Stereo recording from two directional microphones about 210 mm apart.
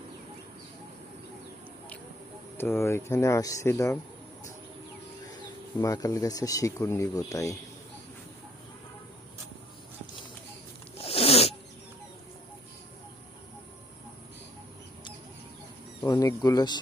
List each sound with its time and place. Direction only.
2.6 s speech: 10° left (ahead or behind)
5.8 s speech: 15° left (ahead or behind)
10.9 s zipper: 30° left (ahead or behind)
16.0 s speech: 15° left (ahead or behind)